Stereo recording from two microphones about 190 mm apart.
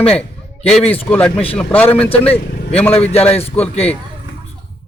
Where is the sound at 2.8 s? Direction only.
10° left (ahead or behind).